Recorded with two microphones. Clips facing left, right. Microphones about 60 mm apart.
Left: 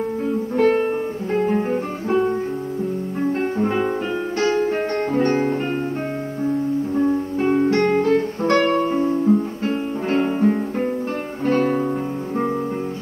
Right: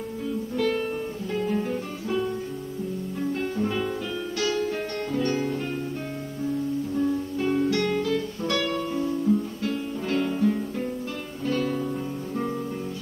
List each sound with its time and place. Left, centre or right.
0.3 s music: left
1.3 s guitar: left
3.2 s music: left
7.0 s guitar: left
11.4 s music: left